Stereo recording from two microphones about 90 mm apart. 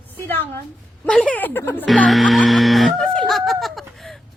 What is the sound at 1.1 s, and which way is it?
Speech, 10° left (ahead or behind).